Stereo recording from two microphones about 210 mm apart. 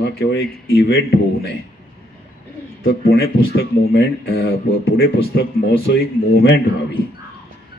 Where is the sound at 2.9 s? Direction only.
50° left (ahead or behind).